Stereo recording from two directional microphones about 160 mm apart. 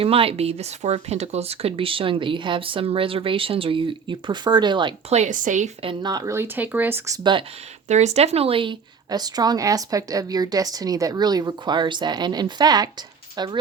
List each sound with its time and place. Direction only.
0.0 s speech: 35° right (ahead or behind)
5.1 s speech: 50° right (ahead or behind)
5.8 s speech: 30° right (ahead or behind)
7.9 s speech: 45° right (ahead or behind); by 13.6 s 25° right (ahead or behind)